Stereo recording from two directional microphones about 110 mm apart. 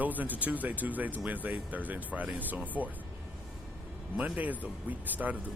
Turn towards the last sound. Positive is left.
turn(degrees=-15)  # may be behind; listen again after turning